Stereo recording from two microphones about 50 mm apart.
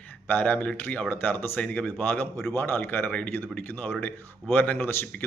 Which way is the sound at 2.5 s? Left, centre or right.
Left.